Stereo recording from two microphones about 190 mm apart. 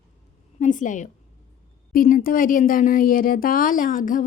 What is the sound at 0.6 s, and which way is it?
Speech, 40° left (ahead or behind).